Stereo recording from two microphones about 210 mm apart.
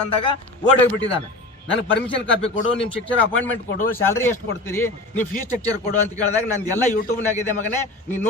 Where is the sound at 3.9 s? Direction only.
10° left (ahead or behind).